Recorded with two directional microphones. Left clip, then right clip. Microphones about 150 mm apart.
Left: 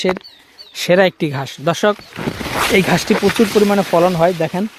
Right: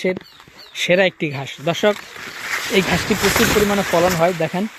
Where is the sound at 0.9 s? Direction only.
35° left (ahead or behind).